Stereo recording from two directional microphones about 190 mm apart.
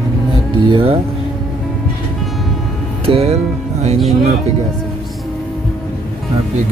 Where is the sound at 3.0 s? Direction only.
30° right (ahead or behind).